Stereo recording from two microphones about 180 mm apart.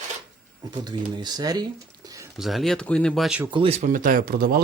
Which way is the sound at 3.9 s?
50° right (ahead or behind).